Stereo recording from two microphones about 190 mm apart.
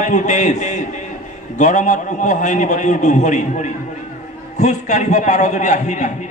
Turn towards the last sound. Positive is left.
turn(degrees=40)  # may be behind; listen again after turning